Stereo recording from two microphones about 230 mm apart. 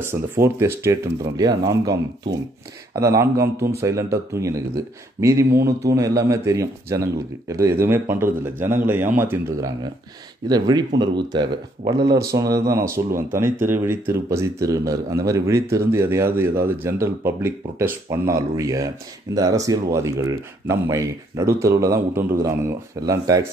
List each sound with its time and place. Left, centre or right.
0.0 s speech: centre
3.0 s speech: centre